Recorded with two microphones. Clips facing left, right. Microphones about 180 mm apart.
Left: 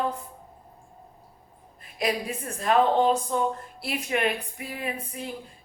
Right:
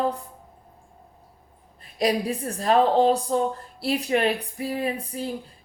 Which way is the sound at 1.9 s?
35° right (ahead or behind).